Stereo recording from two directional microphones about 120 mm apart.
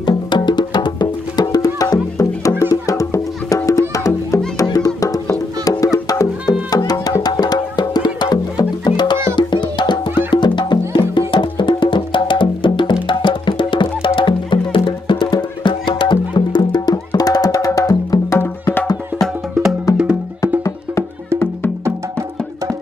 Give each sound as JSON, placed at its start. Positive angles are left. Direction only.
{"t": 0.0, "sound": "music", "side_deg": 40}
{"t": 18.4, "sound": "music", "side_deg": 15}
{"t": 20.0, "sound": "music", "side_deg": -10}